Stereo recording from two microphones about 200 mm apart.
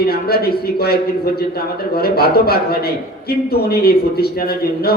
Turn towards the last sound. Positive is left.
turn(degrees=50)  # may be behind; listen again after turning